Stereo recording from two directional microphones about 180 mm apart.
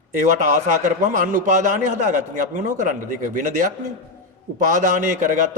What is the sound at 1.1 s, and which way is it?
A man's voice, 45° right (ahead or behind).